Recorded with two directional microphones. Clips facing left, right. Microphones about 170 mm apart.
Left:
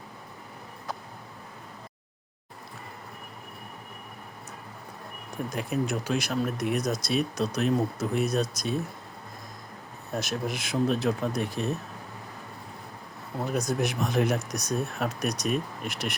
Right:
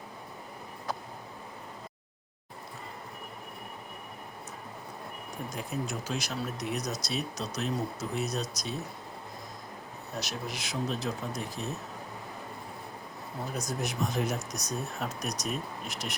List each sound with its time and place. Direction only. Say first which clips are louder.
5.5 s speech: left 7 dB; 60° left (ahead or behind)
10.2 s speech: left 6 dB; 50° left (ahead or behind)
13.5 s speech: left 7 dB; 65° left (ahead or behind)